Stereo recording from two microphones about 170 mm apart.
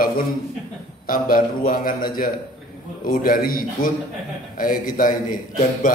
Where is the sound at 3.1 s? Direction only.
55° left (ahead or behind).